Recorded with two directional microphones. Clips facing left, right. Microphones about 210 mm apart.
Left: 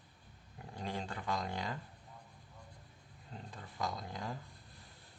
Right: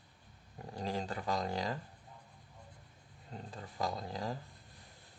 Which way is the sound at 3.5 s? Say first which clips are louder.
Right 3 dB; 35° right (ahead or behind).